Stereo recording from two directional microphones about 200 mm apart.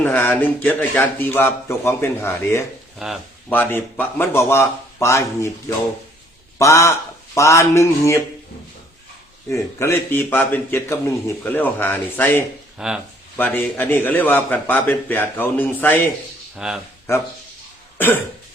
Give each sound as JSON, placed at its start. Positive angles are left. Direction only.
{"t": 0.0, "sound": "a man's voice", "side_deg": 10}
{"t": 3.0, "sound": "speech", "side_deg": 0}
{"t": 3.5, "sound": "a man's voice", "side_deg": 10}
{"t": 9.5, "sound": "a man's voice", "side_deg": 15}
{"t": 12.8, "sound": "speech", "side_deg": -5}
{"t": 13.3, "sound": "a man's voice", "side_deg": 10}
{"t": 16.6, "sound": "speech", "side_deg": -5}